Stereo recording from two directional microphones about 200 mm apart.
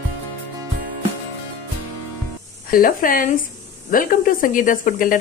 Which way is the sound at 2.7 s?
45° left (ahead or behind).